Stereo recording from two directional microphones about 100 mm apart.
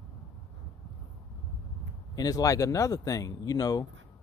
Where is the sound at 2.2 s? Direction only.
40° left (ahead or behind).